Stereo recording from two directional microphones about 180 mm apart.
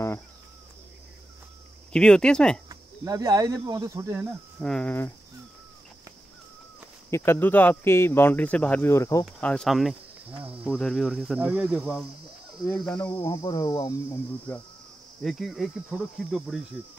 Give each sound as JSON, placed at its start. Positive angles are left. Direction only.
{"t": 1.9, "sound": "speech", "side_deg": 5}
{"t": 2.7, "sound": "speech", "side_deg": -20}
{"t": 4.6, "sound": "speech", "side_deg": 5}
{"t": 7.1, "sound": "speech", "side_deg": 15}
{"t": 9.2, "sound": "speech", "side_deg": 5}
{"t": 12.7, "sound": "speech", "side_deg": 5}
{"t": 15.2, "sound": "speech", "side_deg": 0}